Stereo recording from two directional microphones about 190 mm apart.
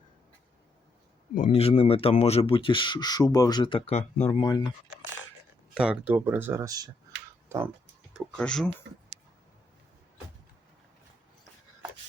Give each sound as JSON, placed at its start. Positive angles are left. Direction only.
{"t": 1.4, "sound": "speech", "side_deg": 30}
{"t": 4.4, "sound": "speech", "side_deg": 20}
{"t": 5.7, "sound": "speech", "side_deg": -5}
{"t": 8.1, "sound": "speech", "side_deg": 5}